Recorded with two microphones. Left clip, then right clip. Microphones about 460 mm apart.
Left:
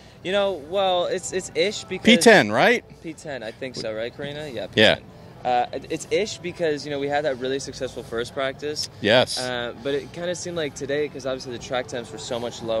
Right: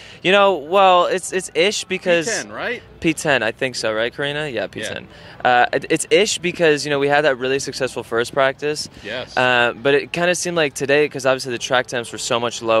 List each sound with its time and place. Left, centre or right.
0.2 s speech: right
2.2 s speech: left
3.0 s speech: right
5.4 s speech: right
9.0 s speech: left
9.4 s speech: right